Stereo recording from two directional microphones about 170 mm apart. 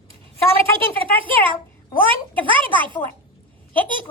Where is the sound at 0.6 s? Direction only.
30° right (ahead or behind).